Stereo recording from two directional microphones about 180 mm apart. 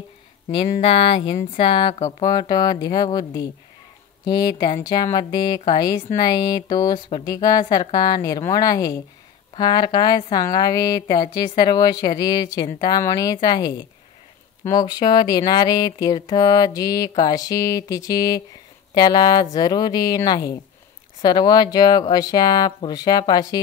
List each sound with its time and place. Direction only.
0.5 s speech: 30° left (ahead or behind)
2.0 s speech: 40° left (ahead or behind)
2.2 s speech: 20° left (ahead or behind)